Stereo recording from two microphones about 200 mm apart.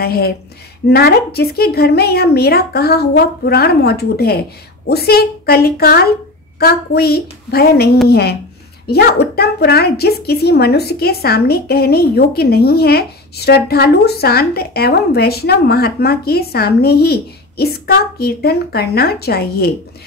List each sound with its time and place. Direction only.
0.0 s a woman's voice: 50° left (ahead or behind)